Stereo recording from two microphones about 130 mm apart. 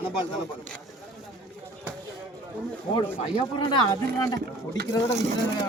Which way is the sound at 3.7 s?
30° left (ahead or behind).